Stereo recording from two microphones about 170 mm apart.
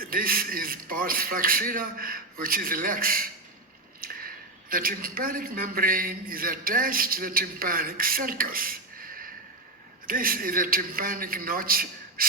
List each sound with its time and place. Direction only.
0.0 s a man's voice: 55° right (ahead or behind)
4.0 s a sound: 60° right (ahead or behind)
4.7 s a man's voice: 55° right (ahead or behind)